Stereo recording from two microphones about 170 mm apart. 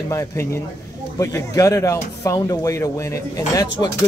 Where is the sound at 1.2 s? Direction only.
20° left (ahead or behind).